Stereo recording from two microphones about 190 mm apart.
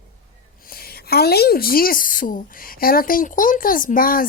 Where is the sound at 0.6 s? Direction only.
50° left (ahead or behind).